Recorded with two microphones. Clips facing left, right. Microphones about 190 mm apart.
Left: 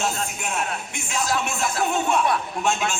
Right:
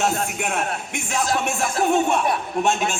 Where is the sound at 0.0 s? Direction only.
55° right (ahead or behind).